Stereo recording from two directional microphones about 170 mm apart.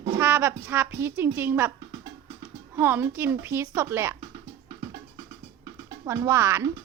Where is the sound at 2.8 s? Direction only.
15° right (ahead or behind).